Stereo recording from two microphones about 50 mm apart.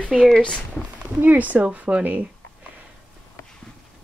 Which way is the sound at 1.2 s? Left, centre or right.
Right.